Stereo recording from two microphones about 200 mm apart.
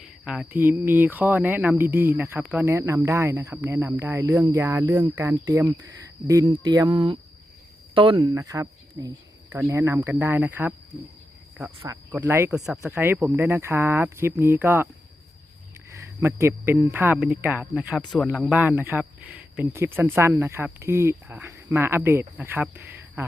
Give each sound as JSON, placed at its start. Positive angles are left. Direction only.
{"t": 0.0, "sound": "speech", "side_deg": -5}
{"t": 12.1, "sound": "speech", "side_deg": -10}
{"t": 16.0, "sound": "speech", "side_deg": -10}